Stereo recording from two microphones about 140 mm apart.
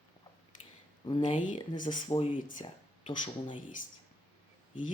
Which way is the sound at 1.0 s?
35° left (ahead or behind).